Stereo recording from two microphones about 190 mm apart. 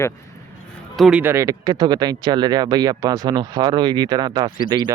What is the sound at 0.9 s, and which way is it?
Speech, 5° right (ahead or behind).